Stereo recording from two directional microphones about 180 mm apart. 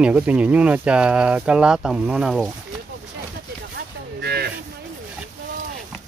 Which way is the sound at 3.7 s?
65° right (ahead or behind).